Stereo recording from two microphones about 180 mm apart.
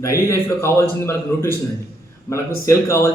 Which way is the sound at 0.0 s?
15° left (ahead or behind).